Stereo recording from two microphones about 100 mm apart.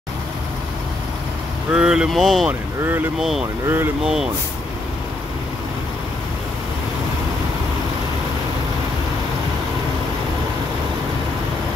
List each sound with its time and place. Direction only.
1.7 s speech: 10° right (ahead or behind)
2.8 s speech: 20° right (ahead or behind)
3.2 s speech: 5° right (ahead or behind)
3.6 s speech: 25° right (ahead or behind)
4.0 s speech: 5° right (ahead or behind)